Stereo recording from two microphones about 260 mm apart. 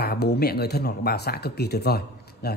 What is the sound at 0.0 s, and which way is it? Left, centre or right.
Speech, left.